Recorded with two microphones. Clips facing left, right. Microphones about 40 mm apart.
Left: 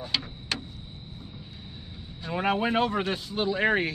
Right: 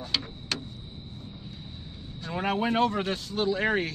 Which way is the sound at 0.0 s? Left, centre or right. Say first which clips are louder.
Left 1 dB; centre.